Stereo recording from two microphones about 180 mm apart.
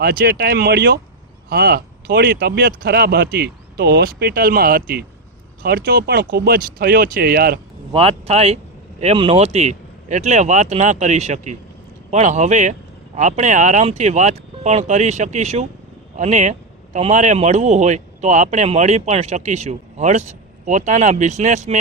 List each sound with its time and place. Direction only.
0.0 s speech: 60° right (ahead or behind)
7.9 s speech: 35° right (ahead or behind)